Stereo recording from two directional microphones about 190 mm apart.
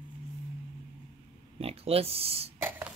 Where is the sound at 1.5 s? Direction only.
30° right (ahead or behind).